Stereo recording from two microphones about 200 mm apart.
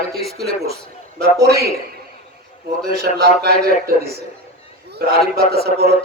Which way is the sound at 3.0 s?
50° right (ahead or behind).